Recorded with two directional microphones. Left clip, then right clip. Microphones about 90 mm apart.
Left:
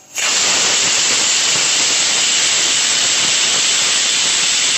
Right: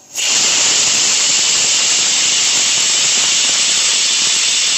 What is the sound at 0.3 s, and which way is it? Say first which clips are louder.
Hiss: right 1 dB; 35° left (ahead or behind).